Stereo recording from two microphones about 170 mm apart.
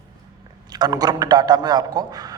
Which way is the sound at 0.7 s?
25° right (ahead or behind).